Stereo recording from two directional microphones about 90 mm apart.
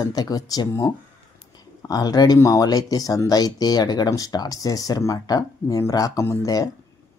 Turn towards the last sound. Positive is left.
turn(degrees=40)  # may be behind; listen again after turning